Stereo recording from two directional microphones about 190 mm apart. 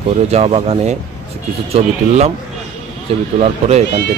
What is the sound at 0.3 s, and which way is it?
Speech, 30° right (ahead or behind).